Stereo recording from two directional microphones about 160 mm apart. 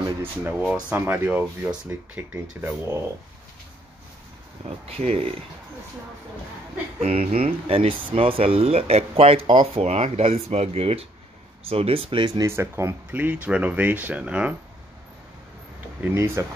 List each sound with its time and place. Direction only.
0.2 s speech: 10° right (ahead or behind)
4.6 s speech: 40° right (ahead or behind)
7.0 s speech: 35° right (ahead or behind); by 14.5 s 5° right (ahead or behind)
16.0 s speech: 15° right (ahead or behind)